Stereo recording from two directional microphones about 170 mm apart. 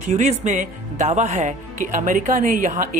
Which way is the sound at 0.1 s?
40° right (ahead or behind).